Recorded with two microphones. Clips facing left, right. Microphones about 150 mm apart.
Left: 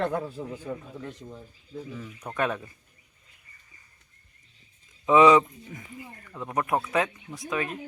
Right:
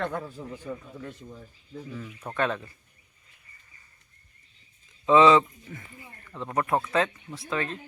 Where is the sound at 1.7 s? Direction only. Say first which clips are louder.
Left 1 dB; centre (ahead or behind).